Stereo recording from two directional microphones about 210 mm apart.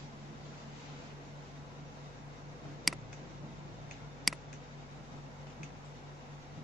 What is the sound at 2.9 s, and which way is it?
Tick, centre (ahead or behind).